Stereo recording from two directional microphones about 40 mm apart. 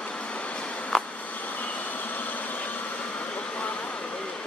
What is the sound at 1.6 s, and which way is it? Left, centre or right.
Vehicle, left.